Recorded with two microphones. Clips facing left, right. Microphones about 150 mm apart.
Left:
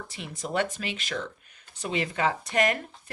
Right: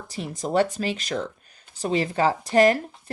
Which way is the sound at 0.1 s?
40° right (ahead or behind).